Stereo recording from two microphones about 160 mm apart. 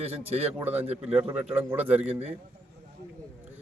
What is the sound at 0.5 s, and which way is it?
A man's voice, 10° right (ahead or behind).